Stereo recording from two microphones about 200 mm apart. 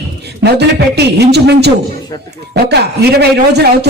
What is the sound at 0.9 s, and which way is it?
Speech, 55° right (ahead or behind).